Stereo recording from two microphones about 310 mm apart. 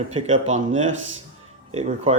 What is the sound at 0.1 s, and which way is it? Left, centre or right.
Speech, right.